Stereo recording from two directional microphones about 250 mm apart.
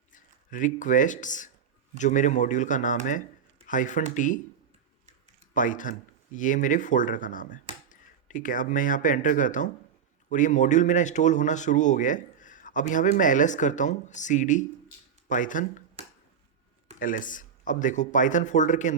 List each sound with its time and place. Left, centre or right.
0.1 s speech: left
5.5 s speech: left
16.0 s finger snapping: right
17.0 s speech: left